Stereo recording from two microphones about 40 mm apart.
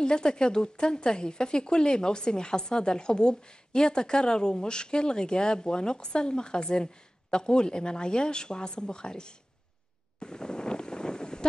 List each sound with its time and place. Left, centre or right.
0.0 s speech: left
10.2 s wind noise: centre